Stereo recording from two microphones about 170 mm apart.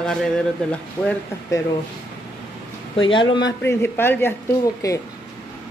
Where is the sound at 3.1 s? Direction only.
25° left (ahead or behind).